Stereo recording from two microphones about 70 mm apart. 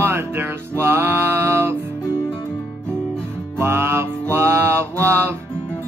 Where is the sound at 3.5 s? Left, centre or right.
Right.